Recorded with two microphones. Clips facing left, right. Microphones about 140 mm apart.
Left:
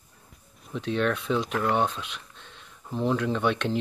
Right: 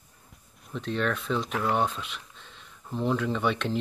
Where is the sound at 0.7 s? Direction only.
Centre (ahead or behind).